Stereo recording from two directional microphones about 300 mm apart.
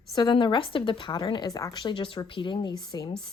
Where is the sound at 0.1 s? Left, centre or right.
Centre.